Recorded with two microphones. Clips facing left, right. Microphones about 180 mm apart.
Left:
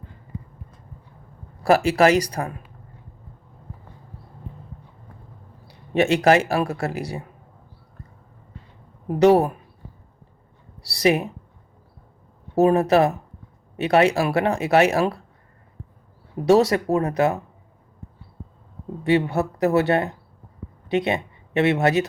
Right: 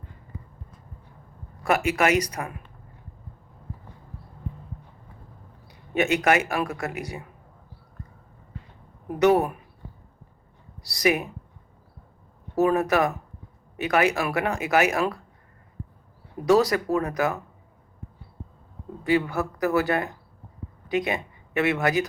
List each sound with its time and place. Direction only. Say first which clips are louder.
1.6 s a man's voice: left 6 dB; 30° left (ahead or behind)
5.6 s a man's voice: left 4 dB; 30° left (ahead or behind)
9.0 s a man's voice: left 4 dB; 30° left (ahead or behind)
10.8 s speech: left 4 dB; 30° left (ahead or behind)
12.5 s speech: left 5 dB; 25° left (ahead or behind)
16.5 s speech: left 3 dB; 25° left (ahead or behind)
19.0 s speech: left 3 dB; 25° left (ahead or behind)